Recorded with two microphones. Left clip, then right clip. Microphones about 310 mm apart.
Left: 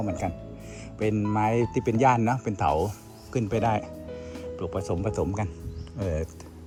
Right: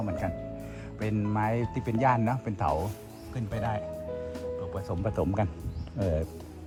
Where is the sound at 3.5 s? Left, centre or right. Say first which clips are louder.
Left 7 dB; left.